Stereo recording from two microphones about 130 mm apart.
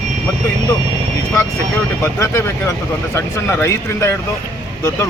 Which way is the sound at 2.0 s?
20° left (ahead or behind).